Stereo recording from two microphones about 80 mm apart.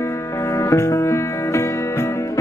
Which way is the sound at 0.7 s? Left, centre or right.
Left.